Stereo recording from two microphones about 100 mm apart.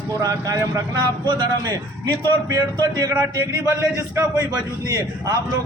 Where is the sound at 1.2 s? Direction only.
45° right (ahead or behind).